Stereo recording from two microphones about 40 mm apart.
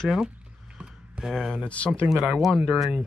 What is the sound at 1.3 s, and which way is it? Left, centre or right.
Speech, centre.